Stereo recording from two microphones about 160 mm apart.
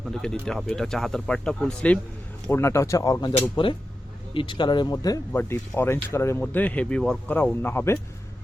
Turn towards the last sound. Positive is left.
turn(degrees=15)  # may be behind; listen again after turning